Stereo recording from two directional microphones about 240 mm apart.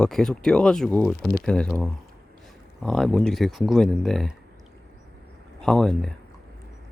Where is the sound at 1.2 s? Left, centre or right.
Left.